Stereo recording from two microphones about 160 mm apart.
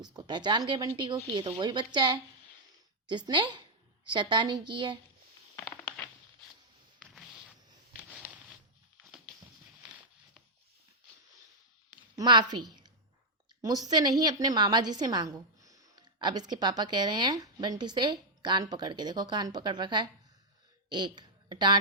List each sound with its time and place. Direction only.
0.0 s a woman's voice: 25° right (ahead or behind)
5.5 s a sound: 10° left (ahead or behind)
12.1 s a woman's voice: 25° right (ahead or behind)